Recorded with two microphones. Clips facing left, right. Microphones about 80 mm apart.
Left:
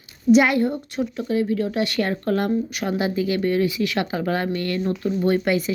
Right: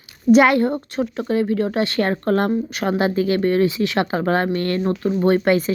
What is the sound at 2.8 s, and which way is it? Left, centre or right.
Speech, right.